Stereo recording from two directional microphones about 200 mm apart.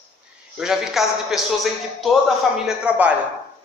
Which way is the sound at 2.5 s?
5° right (ahead or behind).